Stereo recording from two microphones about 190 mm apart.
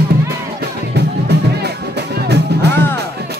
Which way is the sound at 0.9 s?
60° right (ahead or behind).